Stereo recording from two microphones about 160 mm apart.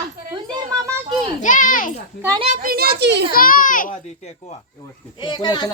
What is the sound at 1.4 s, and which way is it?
Children playing, 55° left (ahead or behind).